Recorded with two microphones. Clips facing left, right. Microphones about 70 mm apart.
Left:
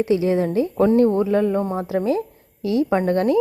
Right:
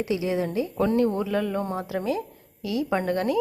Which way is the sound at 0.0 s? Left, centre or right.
Left.